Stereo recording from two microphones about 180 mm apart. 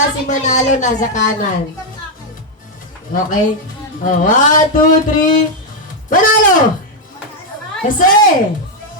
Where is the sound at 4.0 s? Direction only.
45° left (ahead or behind).